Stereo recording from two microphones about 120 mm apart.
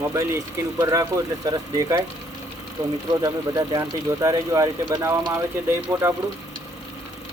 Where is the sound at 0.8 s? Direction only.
25° right (ahead or behind).